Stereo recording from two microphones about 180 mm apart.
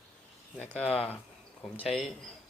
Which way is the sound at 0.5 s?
5° left (ahead or behind).